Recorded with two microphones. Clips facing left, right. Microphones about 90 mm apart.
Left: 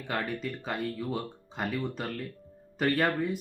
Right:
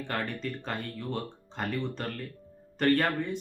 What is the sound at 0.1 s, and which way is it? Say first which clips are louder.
Speech: left 2 dB; 5° left (ahead or behind).